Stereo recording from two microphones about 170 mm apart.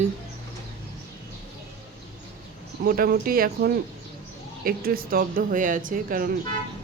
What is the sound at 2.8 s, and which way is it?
Speech, 60° right (ahead or behind).